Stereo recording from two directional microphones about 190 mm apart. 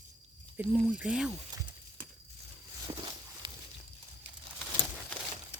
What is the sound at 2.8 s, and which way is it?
Walk, 20° right (ahead or behind).